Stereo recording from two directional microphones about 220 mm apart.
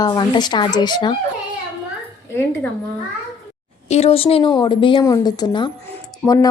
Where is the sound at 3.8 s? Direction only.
30° left (ahead or behind).